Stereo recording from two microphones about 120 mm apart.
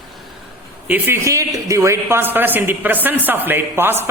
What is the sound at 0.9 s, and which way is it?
A woman's voice, 15° right (ahead or behind).